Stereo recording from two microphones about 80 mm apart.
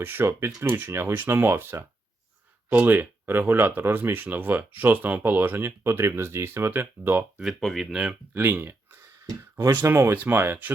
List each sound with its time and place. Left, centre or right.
0.0 s speech: right
7.4 s speech: centre
8.3 s speech: right